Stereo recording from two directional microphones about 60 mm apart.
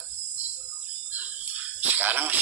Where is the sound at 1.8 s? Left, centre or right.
Right.